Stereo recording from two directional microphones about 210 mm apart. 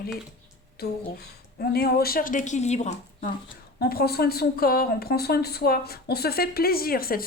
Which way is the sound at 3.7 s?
45° left (ahead or behind).